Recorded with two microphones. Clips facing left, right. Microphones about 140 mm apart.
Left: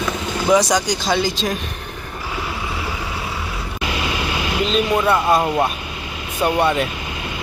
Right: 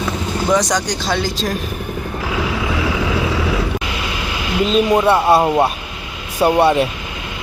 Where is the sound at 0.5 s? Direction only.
5° left (ahead or behind).